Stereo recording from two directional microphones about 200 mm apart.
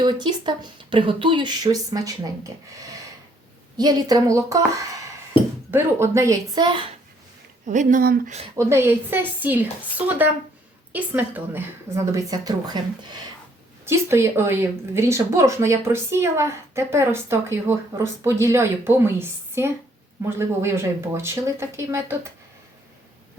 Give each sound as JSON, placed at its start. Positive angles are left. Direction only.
{"t": 0.0, "sound": "speech", "side_deg": -20}
{"t": 7.7, "sound": "speech", "side_deg": -40}
{"t": 8.5, "sound": "speech", "side_deg": -10}
{"t": 10.9, "sound": "speech", "side_deg": -10}